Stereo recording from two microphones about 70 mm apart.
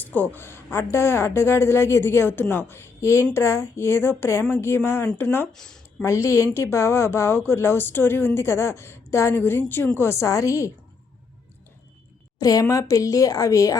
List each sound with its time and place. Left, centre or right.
0.0 s a woman's voice: left
0.3 s a woman's voice: left
5.5 s speech: centre
6.0 s a woman's voice: left
10.0 s a woman's voice: left
12.4 s a woman's voice: left